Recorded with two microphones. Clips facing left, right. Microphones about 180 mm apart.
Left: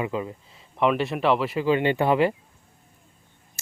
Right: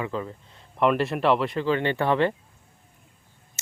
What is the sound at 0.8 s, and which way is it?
Speech, centre (ahead or behind).